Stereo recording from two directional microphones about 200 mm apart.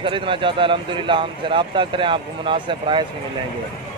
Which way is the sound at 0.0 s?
25° right (ahead or behind).